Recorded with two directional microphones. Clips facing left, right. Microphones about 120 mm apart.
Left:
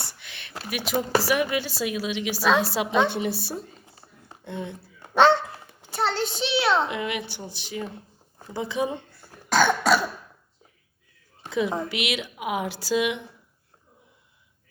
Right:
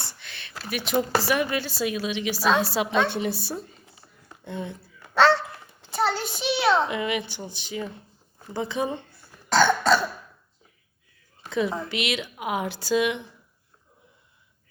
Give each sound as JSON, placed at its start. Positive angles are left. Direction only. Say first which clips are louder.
{"t": 0.0, "sound": "a sound", "louder": "even", "side_deg": 10}
{"t": 0.9, "sound": "a woman's voice", "louder": "even", "side_deg": 5}
{"t": 5.0, "sound": "dog", "louder": "left 1 dB", "side_deg": 20}
{"t": 5.9, "sound": "a sound", "louder": "even", "side_deg": -5}
{"t": 8.5, "sound": "a woman's voice", "louder": "even", "side_deg": 5}
{"t": 9.5, "sound": "cough", "louder": "right 1 dB", "side_deg": 10}
{"t": 11.9, "sound": "a woman's voice", "louder": "even", "side_deg": 5}